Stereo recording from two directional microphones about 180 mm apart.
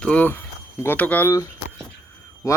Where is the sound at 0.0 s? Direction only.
10° left (ahead or behind).